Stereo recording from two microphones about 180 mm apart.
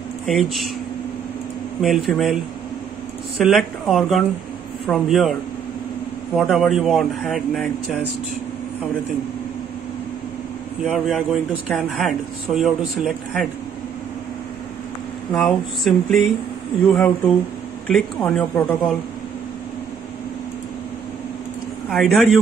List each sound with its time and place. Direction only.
0.3 s speech: centre (ahead or behind)
1.8 s speech: centre (ahead or behind)
3.3 s speech: centre (ahead or behind)
6.4 s speech: centre (ahead or behind)
10.8 s speech: centre (ahead or behind)
15.3 s speech: centre (ahead or behind)
21.8 s a man's voice: centre (ahead or behind)